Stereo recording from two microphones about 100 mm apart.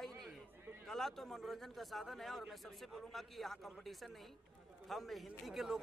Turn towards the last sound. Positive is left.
turn(degrees=-5)  # may be behind; listen again after turning